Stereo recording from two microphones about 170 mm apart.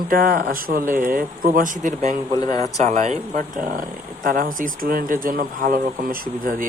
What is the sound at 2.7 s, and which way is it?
Speech, 40° right (ahead or behind).